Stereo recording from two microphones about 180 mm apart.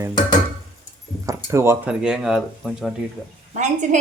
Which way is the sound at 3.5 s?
40° right (ahead or behind).